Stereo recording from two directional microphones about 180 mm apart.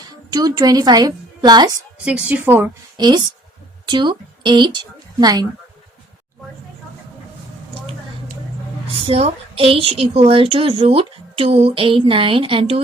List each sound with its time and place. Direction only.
0.1 s a woman's voice: 20° right (ahead or behind)
2.0 s a woman's voice: 10° right (ahead or behind)
3.0 s speech: 25° right (ahead or behind)
9.0 s a woman's voice: 30° right (ahead or behind)